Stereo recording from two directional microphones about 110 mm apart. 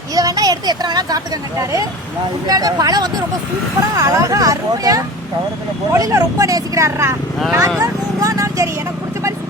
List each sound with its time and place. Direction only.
0.1 s speech: 35° right (ahead or behind)
7.8 s vehicle: 30° right (ahead or behind)